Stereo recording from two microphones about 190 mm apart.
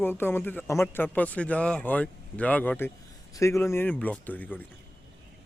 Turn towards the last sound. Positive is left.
turn(degrees=10)  # may be behind; listen again after turning